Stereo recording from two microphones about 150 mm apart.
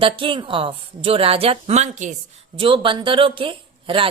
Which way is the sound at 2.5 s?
35° right (ahead or behind).